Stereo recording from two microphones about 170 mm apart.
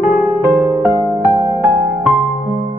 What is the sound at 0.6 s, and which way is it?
Music, 15° right (ahead or behind).